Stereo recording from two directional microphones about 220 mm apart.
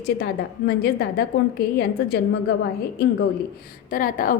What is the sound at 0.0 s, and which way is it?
A woman's voice, 45° left (ahead or behind).